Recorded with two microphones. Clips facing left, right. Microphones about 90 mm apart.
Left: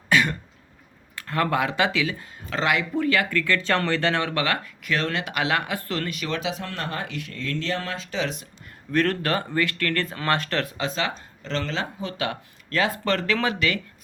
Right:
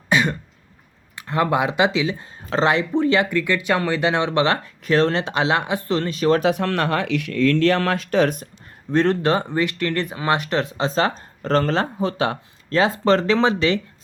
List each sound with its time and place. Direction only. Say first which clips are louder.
0.1 s throat clearing: right 2 dB; 20° right (ahead or behind)
1.1 s speech: right 4 dB; 20° right (ahead or behind); by 6.4 s 35° right (ahead or behind)
6.4 s speech: right 10 dB; 60° right (ahead or behind)
8.9 s speech: right 5 dB; 25° right (ahead or behind)